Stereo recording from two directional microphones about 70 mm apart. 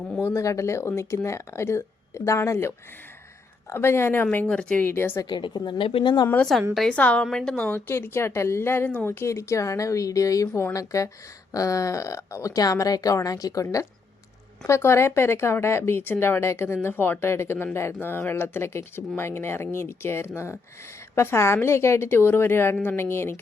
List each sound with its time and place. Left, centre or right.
0.2 s speech: left
0.4 s a woman's voice: left; by 4.9 s centre
4.9 s speech: left
5.3 s speech: left
6.4 s a woman's voice: centre
6.9 s a woman's voice: centre
7.7 s a woman's voice: left
14.7 s speech: left